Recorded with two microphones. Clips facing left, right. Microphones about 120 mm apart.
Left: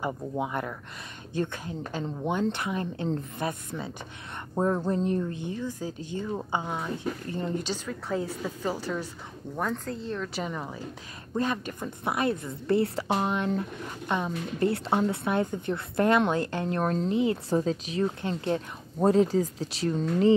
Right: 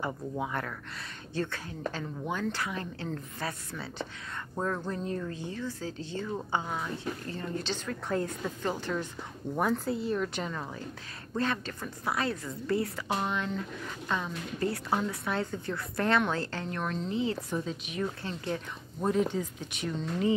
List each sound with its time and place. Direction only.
0.0 s a woman's voice: 15° left (ahead or behind)
7.6 s a woman's voice: 10° left (ahead or behind)
9.6 s speech: 10° right (ahead or behind)
10.4 s a woman's voice: 10° left (ahead or behind)
16.7 s speech: 40° left (ahead or behind)
18.0 s speech: 25° left (ahead or behind)